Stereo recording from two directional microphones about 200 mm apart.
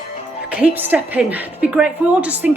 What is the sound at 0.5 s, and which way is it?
A woman's voice, 10° right (ahead or behind).